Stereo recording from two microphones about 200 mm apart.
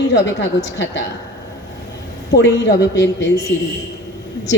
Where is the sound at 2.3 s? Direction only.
60° left (ahead or behind).